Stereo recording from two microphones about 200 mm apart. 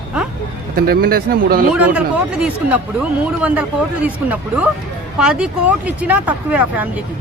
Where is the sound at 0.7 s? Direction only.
50° right (ahead or behind).